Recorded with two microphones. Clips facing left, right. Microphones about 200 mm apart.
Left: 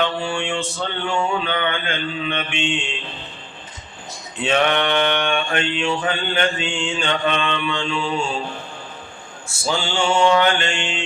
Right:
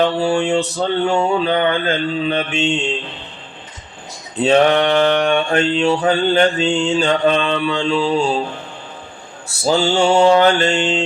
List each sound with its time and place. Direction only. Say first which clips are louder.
0.0 s mantra: right 7 dB; 35° right (ahead or behind)
4.4 s mantra: right 6 dB; 35° right (ahead or behind)
9.6 s mantra: right 7 dB; 40° right (ahead or behind)